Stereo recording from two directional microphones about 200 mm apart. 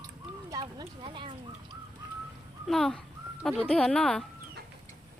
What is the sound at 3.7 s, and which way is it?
Livestock, 5° left (ahead or behind).